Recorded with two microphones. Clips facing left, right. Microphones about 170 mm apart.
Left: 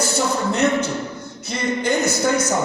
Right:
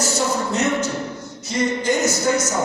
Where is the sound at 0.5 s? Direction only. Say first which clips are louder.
Left 4 dB; 60° left (ahead or behind).